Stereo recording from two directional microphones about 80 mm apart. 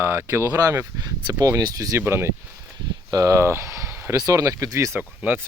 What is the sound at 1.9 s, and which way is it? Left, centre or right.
Speech, right.